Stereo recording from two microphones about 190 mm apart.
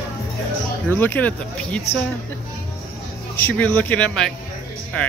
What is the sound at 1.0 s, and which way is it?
Speech, 10° left (ahead or behind).